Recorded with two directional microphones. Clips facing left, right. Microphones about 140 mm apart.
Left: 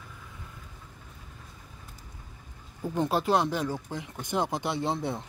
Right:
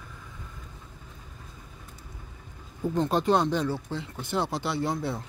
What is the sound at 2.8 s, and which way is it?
Speech, 10° left (ahead or behind).